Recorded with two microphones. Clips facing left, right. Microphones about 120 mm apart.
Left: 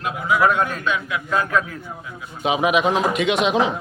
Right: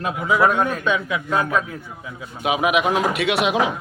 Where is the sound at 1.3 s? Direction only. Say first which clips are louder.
Even; 20° right (ahead or behind).